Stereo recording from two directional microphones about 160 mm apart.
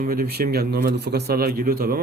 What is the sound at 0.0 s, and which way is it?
Speech, 65° right (ahead or behind).